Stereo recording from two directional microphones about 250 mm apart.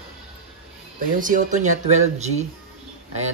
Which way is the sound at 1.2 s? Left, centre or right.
Right.